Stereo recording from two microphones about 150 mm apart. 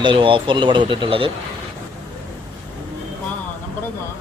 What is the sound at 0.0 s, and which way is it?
Speech, 35° right (ahead or behind).